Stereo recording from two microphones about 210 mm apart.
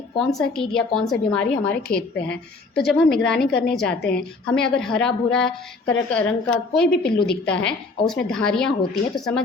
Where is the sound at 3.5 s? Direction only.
50° left (ahead or behind).